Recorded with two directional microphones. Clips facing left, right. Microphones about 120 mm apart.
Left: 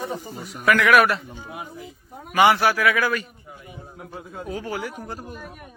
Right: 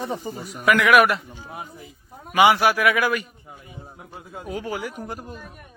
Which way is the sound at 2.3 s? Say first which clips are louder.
Right 1 dB; 10° right (ahead or behind).